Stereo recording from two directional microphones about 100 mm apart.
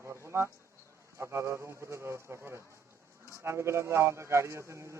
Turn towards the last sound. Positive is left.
turn(degrees=-30)  # may be behind; listen again after turning